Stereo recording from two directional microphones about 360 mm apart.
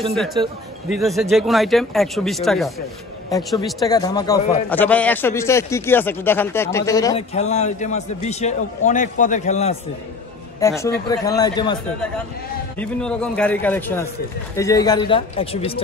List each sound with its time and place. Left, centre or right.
0.1 s a man's voice: centre